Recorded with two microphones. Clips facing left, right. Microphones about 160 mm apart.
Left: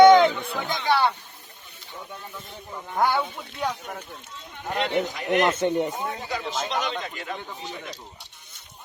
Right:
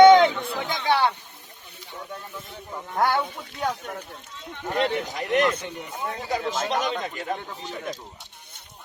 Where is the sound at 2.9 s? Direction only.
10° left (ahead or behind).